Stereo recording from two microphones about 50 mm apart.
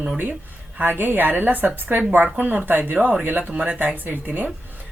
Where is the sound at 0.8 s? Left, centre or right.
Right.